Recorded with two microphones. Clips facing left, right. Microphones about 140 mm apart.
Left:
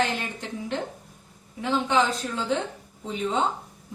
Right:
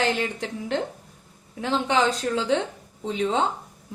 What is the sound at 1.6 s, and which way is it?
Speech, 85° right.